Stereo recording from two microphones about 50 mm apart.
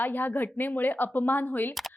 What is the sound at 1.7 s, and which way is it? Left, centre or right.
Speech, centre.